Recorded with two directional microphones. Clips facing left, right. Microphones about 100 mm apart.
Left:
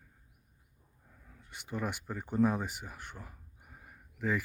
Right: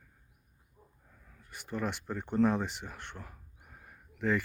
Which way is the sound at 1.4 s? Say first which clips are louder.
Right 1 dB; 20° left (ahead or behind).